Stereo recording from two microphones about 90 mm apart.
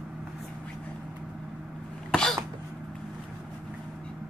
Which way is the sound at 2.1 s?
5° left (ahead or behind).